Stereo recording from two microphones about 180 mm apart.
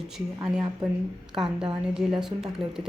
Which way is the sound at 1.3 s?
Centre (ahead or behind).